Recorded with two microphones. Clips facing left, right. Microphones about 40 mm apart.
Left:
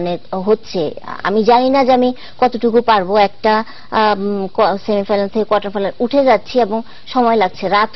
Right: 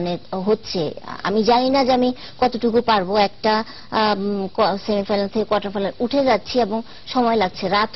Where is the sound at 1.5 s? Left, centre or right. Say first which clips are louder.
Left 6 dB; centre.